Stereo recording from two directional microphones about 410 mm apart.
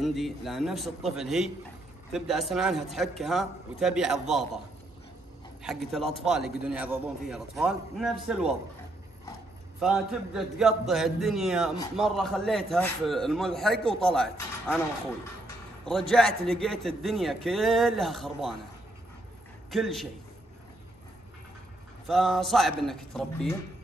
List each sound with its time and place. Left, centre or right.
0.0 s a man's voice: centre
5.6 s a man's voice: centre
9.8 s a man's voice: centre
19.7 s a man's voice: centre
22.0 s a man's voice: centre